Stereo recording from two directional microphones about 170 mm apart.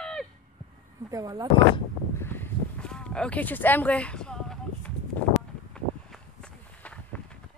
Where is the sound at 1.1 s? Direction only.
20° right (ahead or behind).